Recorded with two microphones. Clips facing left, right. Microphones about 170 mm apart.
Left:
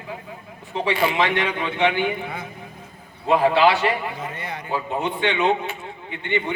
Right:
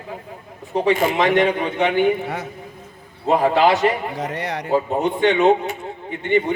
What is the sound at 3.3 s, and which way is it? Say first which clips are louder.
Speech: right 1 dB; 45° right (ahead or behind).